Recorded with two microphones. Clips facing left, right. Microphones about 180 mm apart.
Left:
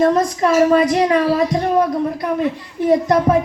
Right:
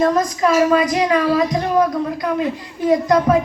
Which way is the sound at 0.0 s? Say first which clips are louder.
Left 1 dB; 30° left (ahead or behind).